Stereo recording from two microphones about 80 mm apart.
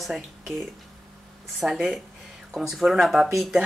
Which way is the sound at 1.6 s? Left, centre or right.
Centre.